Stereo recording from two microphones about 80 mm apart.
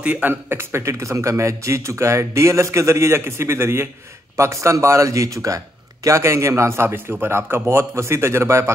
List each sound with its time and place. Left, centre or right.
0.0 s a man's voice: right